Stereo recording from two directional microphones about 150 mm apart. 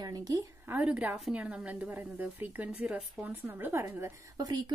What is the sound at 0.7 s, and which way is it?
Speech, 10° right (ahead or behind).